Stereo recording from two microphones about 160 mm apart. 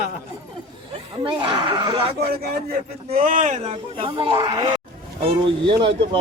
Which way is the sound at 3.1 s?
55° right (ahead or behind).